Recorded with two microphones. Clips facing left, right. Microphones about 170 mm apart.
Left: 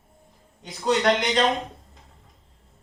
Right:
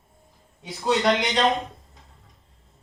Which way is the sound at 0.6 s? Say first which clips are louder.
Even; centre (ahead or behind).